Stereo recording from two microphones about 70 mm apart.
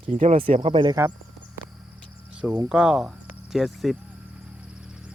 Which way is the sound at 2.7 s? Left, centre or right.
Centre.